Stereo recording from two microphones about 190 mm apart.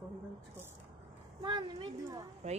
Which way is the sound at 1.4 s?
25° right (ahead or behind).